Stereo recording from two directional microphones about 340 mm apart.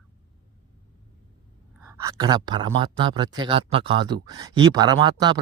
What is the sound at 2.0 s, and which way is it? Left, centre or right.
Speech, centre.